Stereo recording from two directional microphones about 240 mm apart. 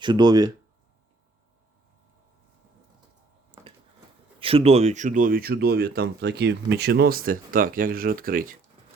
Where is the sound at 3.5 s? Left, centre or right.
Right.